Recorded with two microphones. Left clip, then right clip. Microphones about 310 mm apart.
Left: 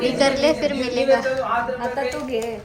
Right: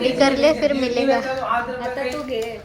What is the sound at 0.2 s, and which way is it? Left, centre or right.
A woman's voice, centre.